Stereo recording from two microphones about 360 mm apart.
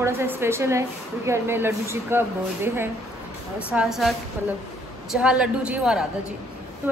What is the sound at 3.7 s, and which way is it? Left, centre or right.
A woman's voice, centre.